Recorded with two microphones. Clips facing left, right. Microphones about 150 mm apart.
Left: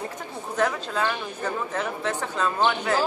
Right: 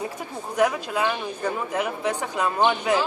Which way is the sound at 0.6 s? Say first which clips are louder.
Right 3 dB; 10° right (ahead or behind).